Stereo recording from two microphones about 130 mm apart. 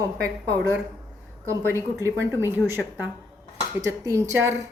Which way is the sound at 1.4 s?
25° right (ahead or behind).